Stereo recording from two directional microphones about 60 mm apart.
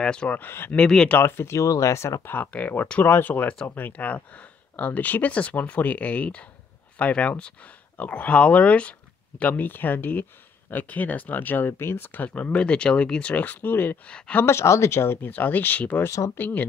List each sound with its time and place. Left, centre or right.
0.0 s speech: centre
0.7 s speech: left
1.2 s speech: left
2.2 s speech: left
12.1 s speech: left
14.0 s speech: centre
14.4 s speech: left
15.2 s speech: left